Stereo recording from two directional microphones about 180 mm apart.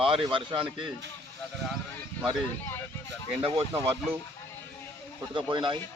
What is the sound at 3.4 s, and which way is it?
Speech, 30° right (ahead or behind).